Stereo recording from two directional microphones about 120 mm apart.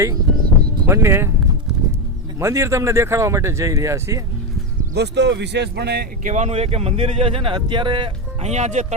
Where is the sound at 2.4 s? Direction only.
25° right (ahead or behind).